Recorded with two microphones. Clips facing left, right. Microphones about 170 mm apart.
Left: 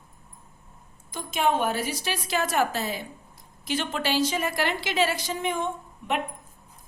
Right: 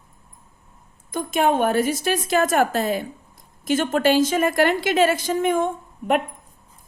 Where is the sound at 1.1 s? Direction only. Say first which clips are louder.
Right 5 dB; 55° right (ahead or behind).